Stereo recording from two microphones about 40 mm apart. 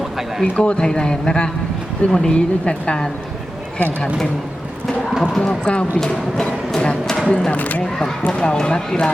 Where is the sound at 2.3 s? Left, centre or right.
Left.